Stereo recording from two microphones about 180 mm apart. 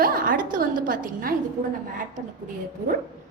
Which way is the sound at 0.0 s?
50° right (ahead or behind).